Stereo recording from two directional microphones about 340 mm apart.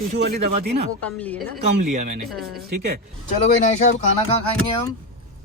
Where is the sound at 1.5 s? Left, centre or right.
Right.